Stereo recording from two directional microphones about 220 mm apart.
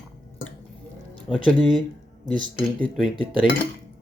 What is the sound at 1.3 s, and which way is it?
Speech, 25° left (ahead or behind).